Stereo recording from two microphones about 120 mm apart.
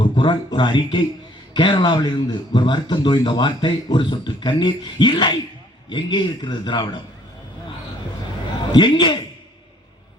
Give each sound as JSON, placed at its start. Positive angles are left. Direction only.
{"t": 0.0, "sound": "speech", "side_deg": 40}
{"t": 8.7, "sound": "speech", "side_deg": 40}